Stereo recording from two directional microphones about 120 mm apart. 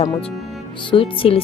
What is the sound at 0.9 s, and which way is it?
Speech, 50° left (ahead or behind).